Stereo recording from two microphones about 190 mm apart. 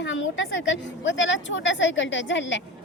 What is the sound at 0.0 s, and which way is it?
A woman's voice, 80° left.